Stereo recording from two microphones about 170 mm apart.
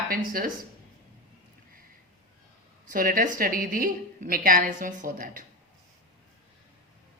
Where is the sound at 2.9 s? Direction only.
55° right (ahead or behind).